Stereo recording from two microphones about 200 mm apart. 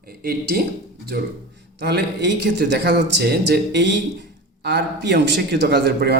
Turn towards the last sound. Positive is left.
turn(degrees=-55)  # may be behind; listen again after turning